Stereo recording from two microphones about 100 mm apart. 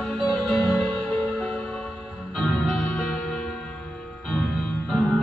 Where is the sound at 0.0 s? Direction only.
5° left (ahead or behind).